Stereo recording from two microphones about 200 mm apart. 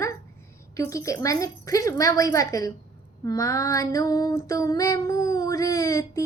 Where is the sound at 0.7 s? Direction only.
15° left (ahead or behind).